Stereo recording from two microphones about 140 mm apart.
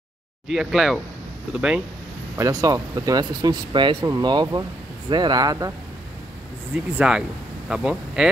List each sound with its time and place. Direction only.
0.5 s speech: centre (ahead or behind)
2.3 s speech: 25° right (ahead or behind)
7.0 s speech: 5° right (ahead or behind)